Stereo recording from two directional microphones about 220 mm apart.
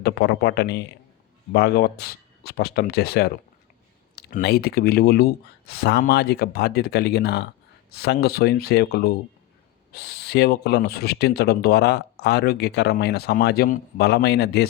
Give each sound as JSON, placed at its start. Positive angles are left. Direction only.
{"t": 0.0, "sound": "speech", "side_deg": 45}